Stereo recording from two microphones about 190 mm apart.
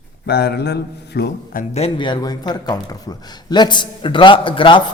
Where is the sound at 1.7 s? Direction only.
30° left (ahead or behind).